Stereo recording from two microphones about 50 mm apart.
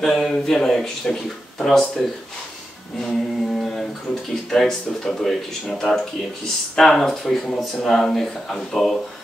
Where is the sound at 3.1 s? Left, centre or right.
Centre.